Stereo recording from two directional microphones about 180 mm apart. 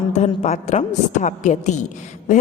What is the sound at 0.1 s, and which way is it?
A woman's voice, 40° left (ahead or behind).